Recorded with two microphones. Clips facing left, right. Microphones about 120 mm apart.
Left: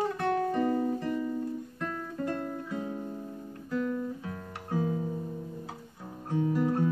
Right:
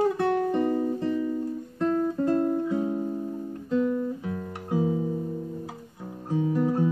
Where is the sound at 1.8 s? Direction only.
30° right (ahead or behind).